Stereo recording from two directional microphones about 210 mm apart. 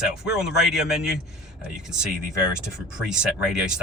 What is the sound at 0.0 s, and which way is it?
Speech, 5° right (ahead or behind).